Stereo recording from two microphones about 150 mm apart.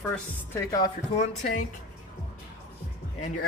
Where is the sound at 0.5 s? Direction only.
20° left (ahead or behind).